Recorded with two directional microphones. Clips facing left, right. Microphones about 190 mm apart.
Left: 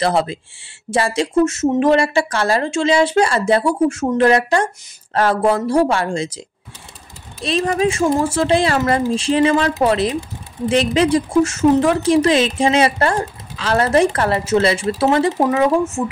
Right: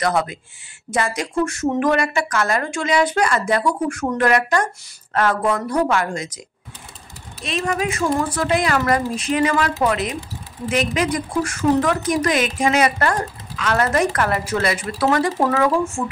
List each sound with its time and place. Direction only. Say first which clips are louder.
0.0 s speech: left 3 dB; 30° left (ahead or behind)
7.4 s speech: left 5 dB; 35° left (ahead or behind)